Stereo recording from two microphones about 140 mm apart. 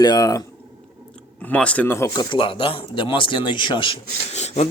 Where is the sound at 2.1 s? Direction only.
30° left (ahead or behind).